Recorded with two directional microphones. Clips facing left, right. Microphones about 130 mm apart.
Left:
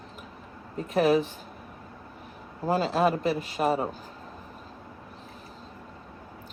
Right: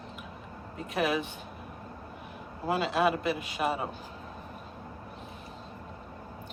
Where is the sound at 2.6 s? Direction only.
35° left (ahead or behind).